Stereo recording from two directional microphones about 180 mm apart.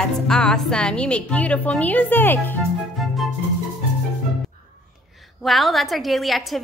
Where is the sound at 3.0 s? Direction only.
Centre (ahead or behind).